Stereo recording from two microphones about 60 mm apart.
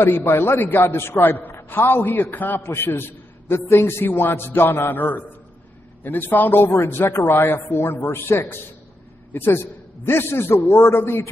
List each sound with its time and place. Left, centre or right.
0.0 s a man's voice: left